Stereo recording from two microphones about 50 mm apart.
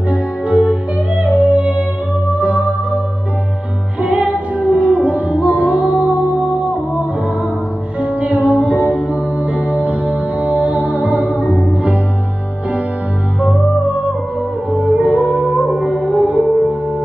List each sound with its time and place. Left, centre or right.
0.1 s music: right
4.6 s music: right
8.0 s music: right
8.7 s music: left
9.8 s music: right
14.7 s music: right
15.3 s music: right